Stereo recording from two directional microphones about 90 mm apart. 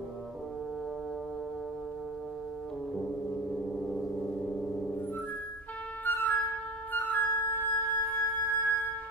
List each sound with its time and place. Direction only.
3.4 s gong: 5° left (ahead or behind)
6.0 s flute: 20° left (ahead or behind)